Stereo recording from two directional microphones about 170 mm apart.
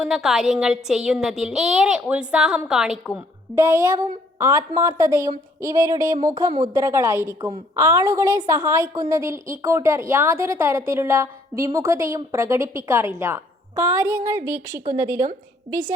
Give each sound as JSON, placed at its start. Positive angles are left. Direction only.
{"t": 0.0, "sound": "speech", "side_deg": -5}
{"t": 3.5, "sound": "a woman's voice", "side_deg": -15}